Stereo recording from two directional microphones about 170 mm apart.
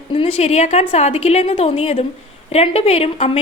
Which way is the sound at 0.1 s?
35° left (ahead or behind).